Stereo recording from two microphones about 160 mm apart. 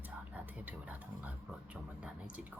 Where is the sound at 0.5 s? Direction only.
10° right (ahead or behind).